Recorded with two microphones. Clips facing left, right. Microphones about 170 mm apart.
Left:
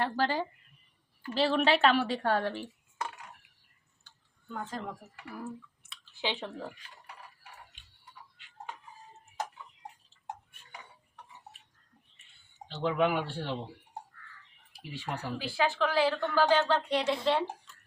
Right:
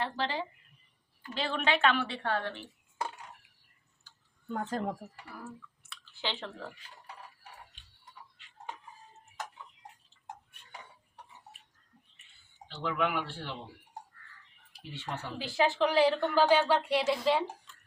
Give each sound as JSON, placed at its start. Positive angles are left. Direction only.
{"t": 0.0, "sound": "a woman's voice", "side_deg": 45}
{"t": 4.5, "sound": "speech", "side_deg": -40}
{"t": 5.8, "sound": "chewing", "side_deg": 15}
{"t": 12.6, "sound": "a woman's voice", "side_deg": 30}
{"t": 14.9, "sound": "speech", "side_deg": 10}
{"t": 15.4, "sound": "a woman's voice", "side_deg": -20}